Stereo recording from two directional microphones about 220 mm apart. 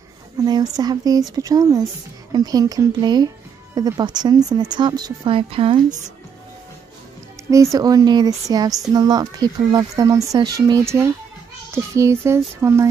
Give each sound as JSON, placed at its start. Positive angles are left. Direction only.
{"t": 0.4, "sound": "a sound", "side_deg": -15}
{"t": 1.3, "sound": "speech", "side_deg": -15}
{"t": 7.5, "sound": "speech", "side_deg": -15}